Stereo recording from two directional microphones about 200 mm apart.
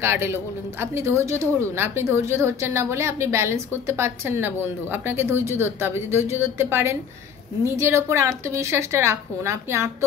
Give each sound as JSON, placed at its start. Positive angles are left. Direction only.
{"t": 0.0, "sound": "a woman's voice", "side_deg": -10}